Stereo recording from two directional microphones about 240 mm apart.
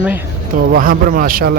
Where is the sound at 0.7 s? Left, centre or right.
Right.